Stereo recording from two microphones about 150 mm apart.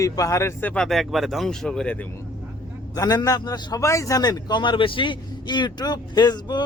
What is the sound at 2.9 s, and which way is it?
A man's voice, 25° left (ahead or behind).